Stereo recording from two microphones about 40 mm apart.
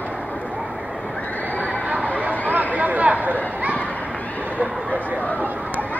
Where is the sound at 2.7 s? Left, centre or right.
Right.